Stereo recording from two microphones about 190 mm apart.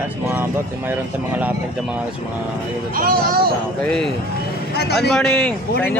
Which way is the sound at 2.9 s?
50° right (ahead or behind).